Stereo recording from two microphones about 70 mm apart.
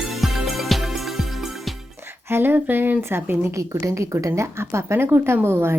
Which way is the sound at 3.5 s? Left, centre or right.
Right.